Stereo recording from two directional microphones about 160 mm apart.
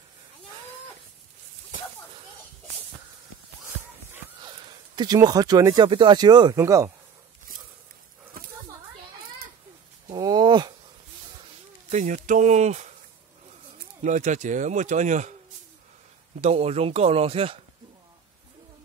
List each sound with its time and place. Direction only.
4.5 s speech: 30° right (ahead or behind)
10.1 s a sound: 25° right (ahead or behind)
11.9 s speech: 50° right (ahead or behind)
14.0 s speech: 50° right (ahead or behind)
16.3 s speech: 40° right (ahead or behind)